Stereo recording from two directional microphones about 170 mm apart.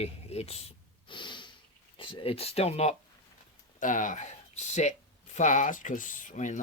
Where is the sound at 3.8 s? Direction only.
50° left (ahead or behind).